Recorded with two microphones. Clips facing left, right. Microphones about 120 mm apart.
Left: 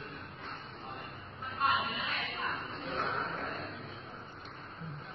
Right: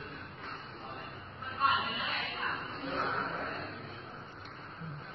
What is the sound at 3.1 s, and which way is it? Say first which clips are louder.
Vehicle: right 1 dB; centre (ahead or behind).